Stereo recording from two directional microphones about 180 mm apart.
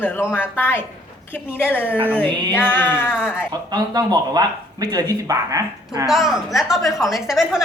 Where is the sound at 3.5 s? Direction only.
25° right (ahead or behind).